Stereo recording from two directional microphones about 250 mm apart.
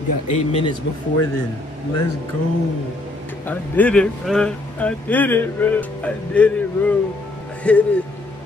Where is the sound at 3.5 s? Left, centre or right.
Centre.